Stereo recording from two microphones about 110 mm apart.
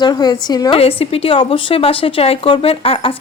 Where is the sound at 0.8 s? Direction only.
60° left (ahead or behind).